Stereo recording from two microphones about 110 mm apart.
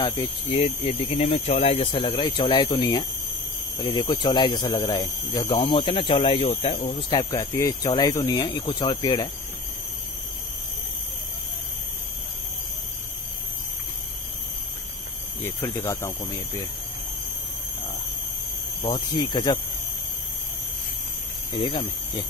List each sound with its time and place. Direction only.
0.0 s speech: 45° left (ahead or behind)
0.6 s speech: 60° left (ahead or behind)
2.8 s speech: 35° left (ahead or behind)
5.6 s speech: 50° left (ahead or behind)
7.1 s speech: 40° left (ahead or behind)
15.4 s speech: 25° left (ahead or behind)
18.8 s speech: 40° left (ahead or behind)
21.5 s speech: 45° left (ahead or behind)